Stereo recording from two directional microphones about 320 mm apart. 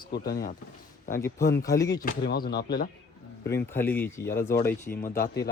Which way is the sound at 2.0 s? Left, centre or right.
Left.